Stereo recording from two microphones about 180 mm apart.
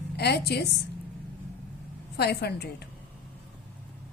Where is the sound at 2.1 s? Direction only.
65° left (ahead or behind).